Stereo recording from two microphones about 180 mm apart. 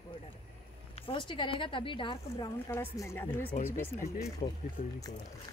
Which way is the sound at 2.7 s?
15° left (ahead or behind).